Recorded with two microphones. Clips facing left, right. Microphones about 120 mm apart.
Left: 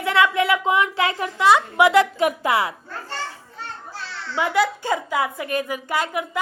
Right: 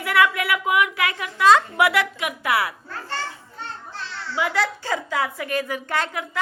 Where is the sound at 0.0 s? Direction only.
25° left (ahead or behind).